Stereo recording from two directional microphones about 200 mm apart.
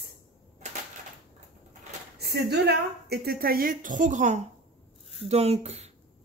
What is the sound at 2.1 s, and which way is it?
A woman's voice, 55° right (ahead or behind).